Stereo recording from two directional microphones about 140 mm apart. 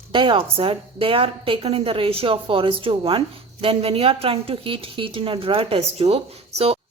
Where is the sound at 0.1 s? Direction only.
35° right (ahead or behind).